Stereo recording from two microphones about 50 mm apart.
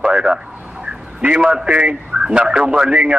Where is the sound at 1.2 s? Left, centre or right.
Centre.